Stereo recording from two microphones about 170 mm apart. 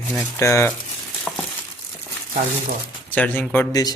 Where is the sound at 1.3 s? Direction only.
10° left (ahead or behind).